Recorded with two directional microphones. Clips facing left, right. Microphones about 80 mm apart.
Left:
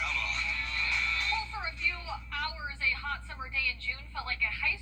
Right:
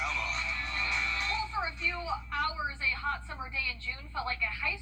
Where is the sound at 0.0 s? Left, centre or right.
Centre.